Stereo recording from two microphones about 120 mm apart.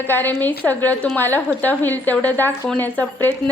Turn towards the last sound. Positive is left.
turn(degrees=15)  # may be behind; listen again after turning